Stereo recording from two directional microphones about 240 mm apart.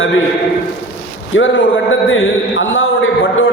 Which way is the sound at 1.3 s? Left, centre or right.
Left.